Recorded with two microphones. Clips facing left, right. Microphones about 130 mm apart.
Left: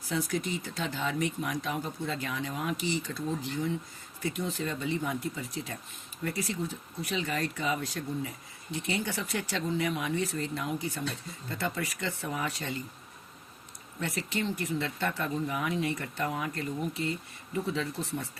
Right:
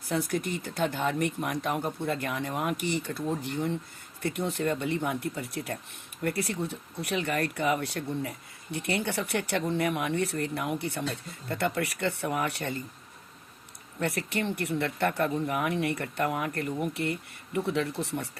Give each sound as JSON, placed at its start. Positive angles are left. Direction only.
{"t": 0.1, "sound": "speech", "side_deg": -55}
{"t": 14.0, "sound": "speech", "side_deg": -60}